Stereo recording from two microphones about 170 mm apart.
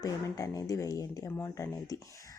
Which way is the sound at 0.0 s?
20° left (ahead or behind).